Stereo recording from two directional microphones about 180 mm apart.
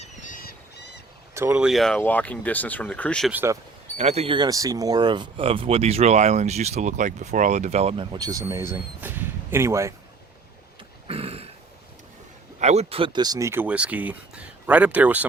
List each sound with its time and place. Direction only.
0.0 s bird: 45° left (ahead or behind); by 1.0 s 60° left (ahead or behind)
1.3 s speech: 15° right (ahead or behind)
1.6 s speech: centre (ahead or behind)
3.3 s speech: 15° right (ahead or behind)
3.9 s speech: 35° right (ahead or behind); by 9.9 s 15° right (ahead or behind)
11.1 s a sound: 35° right (ahead or behind)
12.5 s speech: 40° right (ahead or behind); by 15.3 s 10° right (ahead or behind)